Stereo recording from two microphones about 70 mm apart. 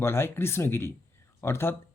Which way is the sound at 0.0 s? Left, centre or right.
Left.